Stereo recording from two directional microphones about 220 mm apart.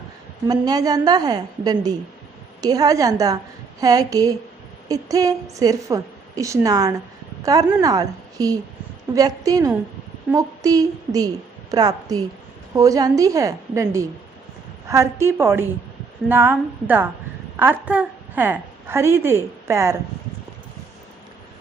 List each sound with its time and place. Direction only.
0.4 s a woman's voice: 20° right (ahead or behind)